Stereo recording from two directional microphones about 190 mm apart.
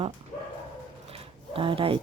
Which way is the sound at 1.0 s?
30° right (ahead or behind).